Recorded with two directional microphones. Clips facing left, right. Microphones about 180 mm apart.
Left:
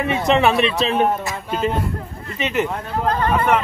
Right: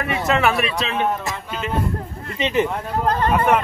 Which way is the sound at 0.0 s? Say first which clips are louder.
Left 3 dB; 20° left (ahead or behind).